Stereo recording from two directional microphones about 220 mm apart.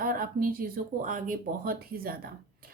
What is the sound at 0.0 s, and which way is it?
A woman's voice, 40° right (ahead or behind).